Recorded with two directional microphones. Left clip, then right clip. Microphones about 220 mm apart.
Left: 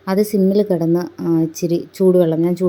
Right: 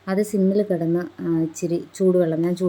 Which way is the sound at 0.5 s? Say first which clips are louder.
Left 5 dB; 15° left (ahead or behind).